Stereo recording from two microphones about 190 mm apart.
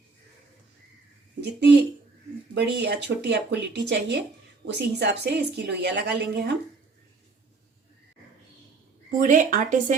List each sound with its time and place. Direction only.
2.6 s a woman's voice: 65° right (ahead or behind)
9.0 s speech: 45° right (ahead or behind)